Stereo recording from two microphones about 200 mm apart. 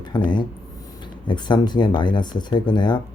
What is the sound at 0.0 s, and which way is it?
Speech, 20° left (ahead or behind).